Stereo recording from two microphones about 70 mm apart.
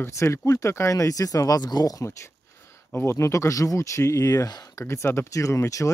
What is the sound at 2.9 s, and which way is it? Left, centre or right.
Speech, left.